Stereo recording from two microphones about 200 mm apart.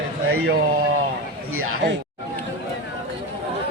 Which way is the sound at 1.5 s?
75° right (ahead or behind).